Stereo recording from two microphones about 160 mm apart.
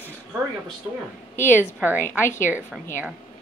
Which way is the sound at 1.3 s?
15° left (ahead or behind).